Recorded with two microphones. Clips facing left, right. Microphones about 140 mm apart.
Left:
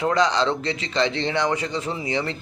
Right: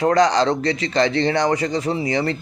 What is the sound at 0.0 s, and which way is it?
A man's voice, 40° right (ahead or behind).